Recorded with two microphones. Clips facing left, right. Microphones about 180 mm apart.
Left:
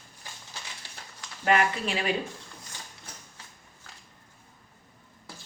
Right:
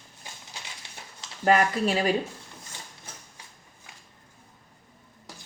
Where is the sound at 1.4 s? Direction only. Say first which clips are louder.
Right 3 dB; 40° right (ahead or behind).